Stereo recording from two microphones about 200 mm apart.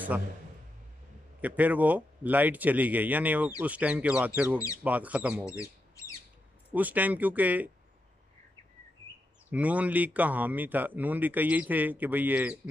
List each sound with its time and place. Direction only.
1.4 s speech: 10° right (ahead or behind)
5.4 s a sound: 15° left (ahead or behind)
6.7 s speech: 10° right (ahead or behind)
9.5 s speech: 5° right (ahead or behind)